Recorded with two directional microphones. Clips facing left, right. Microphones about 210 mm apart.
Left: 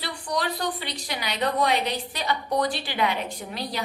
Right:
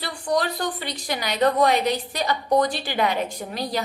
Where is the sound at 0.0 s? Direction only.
45° right (ahead or behind).